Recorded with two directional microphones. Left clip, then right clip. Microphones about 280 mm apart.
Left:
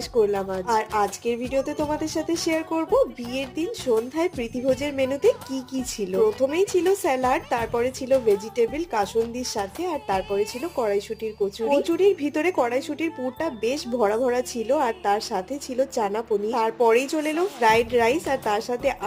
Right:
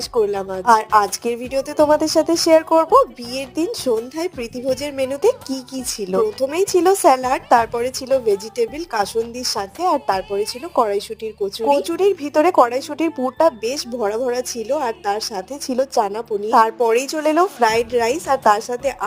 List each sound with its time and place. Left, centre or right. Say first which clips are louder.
0.1 s a woman's voice: right 2 dB; right